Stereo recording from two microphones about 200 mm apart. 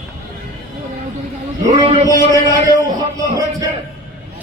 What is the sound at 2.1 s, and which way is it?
Speech, 15° left (ahead or behind).